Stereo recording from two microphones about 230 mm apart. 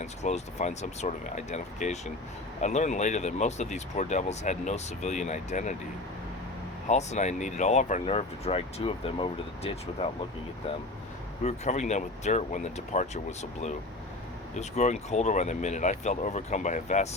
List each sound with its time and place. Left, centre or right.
0.0 s speech: left
6.8 s speech: left
11.4 s speech: left